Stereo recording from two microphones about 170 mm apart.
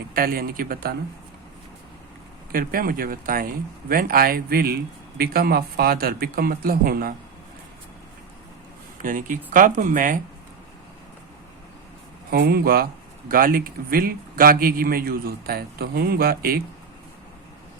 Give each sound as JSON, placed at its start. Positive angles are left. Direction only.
{"t": 0.1, "sound": "speech", "side_deg": -60}
{"t": 2.5, "sound": "speech", "side_deg": -55}
{"t": 9.0, "sound": "speech", "side_deg": -50}
{"t": 12.3, "sound": "speech", "side_deg": -65}